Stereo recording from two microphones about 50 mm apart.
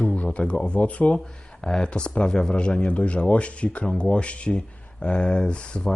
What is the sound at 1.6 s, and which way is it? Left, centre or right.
A man's voice, centre.